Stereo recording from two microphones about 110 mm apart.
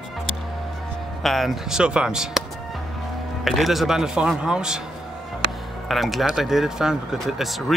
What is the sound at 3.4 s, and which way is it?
Speech, centre (ahead or behind).